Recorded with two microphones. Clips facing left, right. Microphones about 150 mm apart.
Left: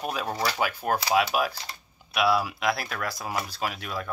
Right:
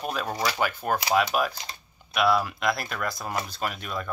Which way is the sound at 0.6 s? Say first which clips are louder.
Even; 5° left (ahead or behind).